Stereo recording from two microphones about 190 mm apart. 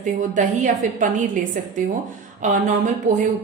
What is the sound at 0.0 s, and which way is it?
Speech, 40° right (ahead or behind).